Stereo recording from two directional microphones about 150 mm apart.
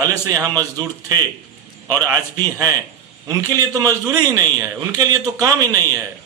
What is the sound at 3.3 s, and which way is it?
A man's voice, 25° right (ahead or behind).